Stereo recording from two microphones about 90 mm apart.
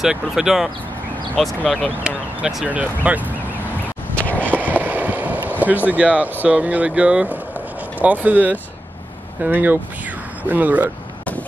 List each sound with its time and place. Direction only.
0.0 s speech: 5° right (ahead or behind)
2.0 s speech: 10° right (ahead or behind)
4.4 s a sound: 20° right (ahead or behind)
5.9 s speech: 15° right (ahead or behind)